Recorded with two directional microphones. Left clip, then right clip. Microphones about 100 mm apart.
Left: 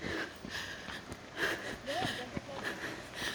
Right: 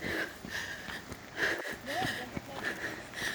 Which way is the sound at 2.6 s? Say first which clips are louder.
Right 4 dB; 35° left (ahead or behind).